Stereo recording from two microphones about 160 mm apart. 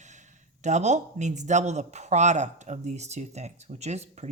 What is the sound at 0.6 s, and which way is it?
Speech, 45° right (ahead or behind).